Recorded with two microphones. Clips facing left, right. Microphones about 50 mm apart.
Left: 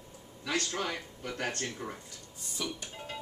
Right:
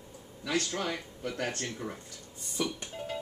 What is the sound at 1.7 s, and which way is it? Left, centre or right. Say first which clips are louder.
Speech: right 1 dB; centre.